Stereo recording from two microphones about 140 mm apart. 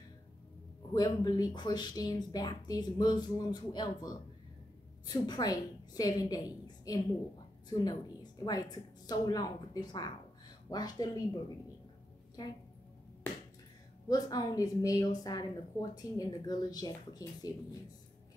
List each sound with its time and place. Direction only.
0.9 s a woman's voice: 30° left (ahead or behind)
14.0 s a woman's voice: 30° left (ahead or behind)